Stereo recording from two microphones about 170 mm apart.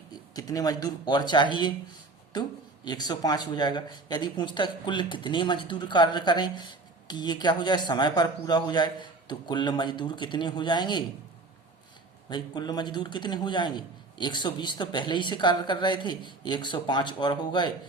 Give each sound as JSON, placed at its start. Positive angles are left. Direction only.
{"t": 0.1, "sound": "a man's voice", "side_deg": 20}
{"t": 12.3, "sound": "a man's voice", "side_deg": 25}